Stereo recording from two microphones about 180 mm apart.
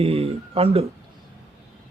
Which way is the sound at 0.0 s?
35° right (ahead or behind).